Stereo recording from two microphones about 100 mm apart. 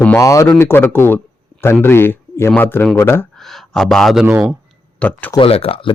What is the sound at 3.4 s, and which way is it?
Speech, centre (ahead or behind).